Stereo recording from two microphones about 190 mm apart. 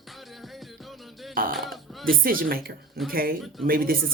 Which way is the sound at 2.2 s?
50° right (ahead or behind).